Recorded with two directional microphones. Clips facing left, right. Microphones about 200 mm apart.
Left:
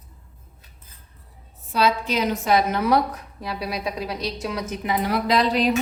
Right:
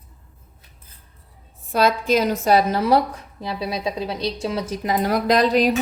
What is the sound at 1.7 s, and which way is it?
A woman's voice, 50° right (ahead or behind).